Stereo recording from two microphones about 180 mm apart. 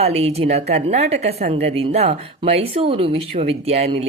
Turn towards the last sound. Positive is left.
turn(degrees=-35)  # may be behind; listen again after turning